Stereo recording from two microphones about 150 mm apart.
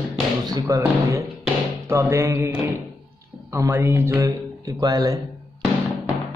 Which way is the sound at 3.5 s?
20° right (ahead or behind).